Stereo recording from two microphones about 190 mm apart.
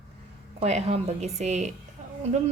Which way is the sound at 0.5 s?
35° right (ahead or behind).